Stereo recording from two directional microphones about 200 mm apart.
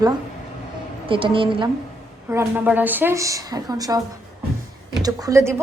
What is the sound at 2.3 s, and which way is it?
Speech, 10° right (ahead or behind).